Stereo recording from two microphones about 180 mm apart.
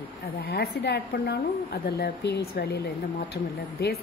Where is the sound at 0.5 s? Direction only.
65° left (ahead or behind).